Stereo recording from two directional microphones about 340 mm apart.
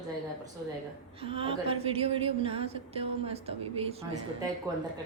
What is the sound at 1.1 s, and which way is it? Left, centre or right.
A woman's voice, centre.